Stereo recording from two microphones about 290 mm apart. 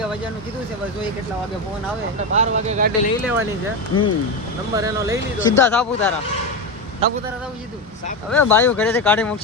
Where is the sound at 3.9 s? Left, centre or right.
Left.